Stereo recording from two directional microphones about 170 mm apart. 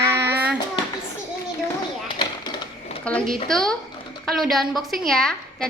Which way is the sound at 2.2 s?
25° left (ahead or behind).